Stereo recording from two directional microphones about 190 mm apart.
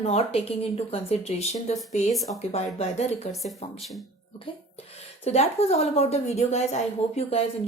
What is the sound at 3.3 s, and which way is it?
Speech, centre (ahead or behind).